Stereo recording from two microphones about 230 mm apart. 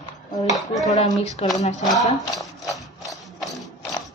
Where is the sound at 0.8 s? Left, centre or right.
Left.